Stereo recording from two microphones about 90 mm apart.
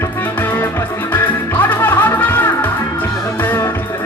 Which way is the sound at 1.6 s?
20° left (ahead or behind).